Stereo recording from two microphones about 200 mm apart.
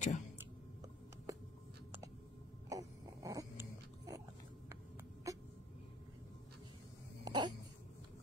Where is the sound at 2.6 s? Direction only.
15° right (ahead or behind).